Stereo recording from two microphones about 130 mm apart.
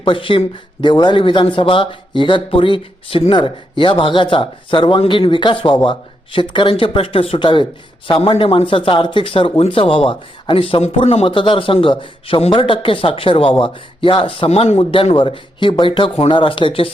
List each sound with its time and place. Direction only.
0.0 s speech: 40° left (ahead or behind)